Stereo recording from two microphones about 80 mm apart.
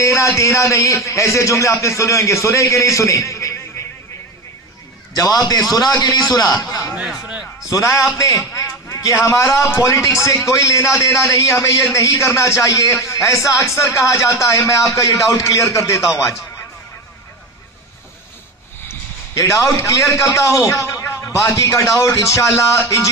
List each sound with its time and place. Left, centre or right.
0.0 s a man's voice: left
5.1 s a man's voice: left
6.9 s a sound: centre
7.7 s a man's voice: left
18.9 s a man's voice: left